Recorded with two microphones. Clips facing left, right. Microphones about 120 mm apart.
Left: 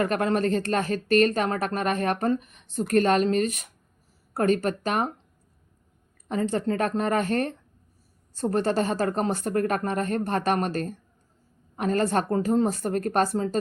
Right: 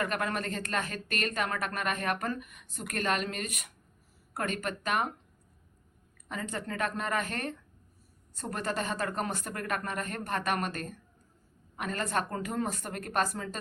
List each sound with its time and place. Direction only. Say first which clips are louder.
0.0 s speech: left 9 dB; 30° left (ahead or behind)
6.2 s speech: left 11 dB; 35° left (ahead or behind)